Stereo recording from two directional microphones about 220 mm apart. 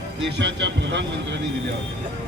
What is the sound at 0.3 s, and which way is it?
Speech, 50° right (ahead or behind).